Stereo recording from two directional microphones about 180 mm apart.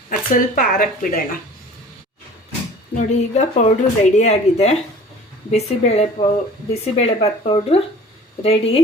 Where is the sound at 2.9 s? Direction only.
40° left (ahead or behind).